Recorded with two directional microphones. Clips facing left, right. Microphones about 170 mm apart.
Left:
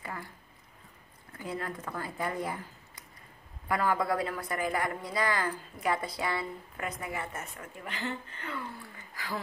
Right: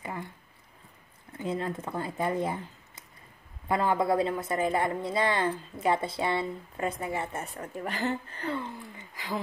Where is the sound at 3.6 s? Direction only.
25° right (ahead or behind); by 8.5 s 40° right (ahead or behind).